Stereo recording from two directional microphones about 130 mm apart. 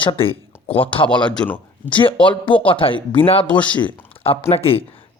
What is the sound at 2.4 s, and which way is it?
Speech, 40° left (ahead or behind).